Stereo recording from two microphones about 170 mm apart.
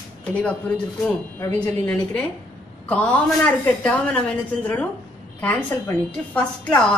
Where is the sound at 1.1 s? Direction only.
10° left (ahead or behind).